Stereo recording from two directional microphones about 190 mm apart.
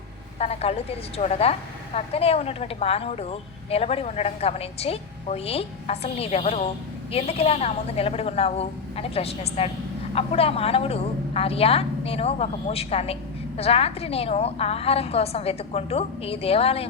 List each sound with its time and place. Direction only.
0.3 s a woman's voice: 35° left (ahead or behind)